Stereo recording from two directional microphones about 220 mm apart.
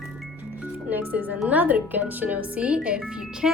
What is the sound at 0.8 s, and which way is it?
A woman's voice, 10° right (ahead or behind).